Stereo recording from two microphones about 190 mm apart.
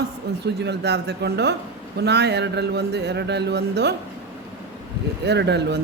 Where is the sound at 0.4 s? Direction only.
60° right (ahead or behind).